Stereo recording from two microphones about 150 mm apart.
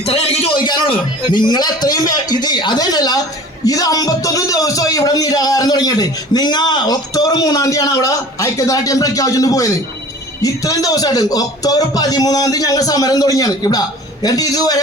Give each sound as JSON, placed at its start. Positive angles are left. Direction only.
{"t": 0.0, "sound": "a man's voice", "side_deg": 40}